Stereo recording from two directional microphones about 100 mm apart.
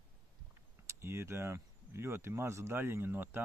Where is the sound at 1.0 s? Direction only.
25° right (ahead or behind).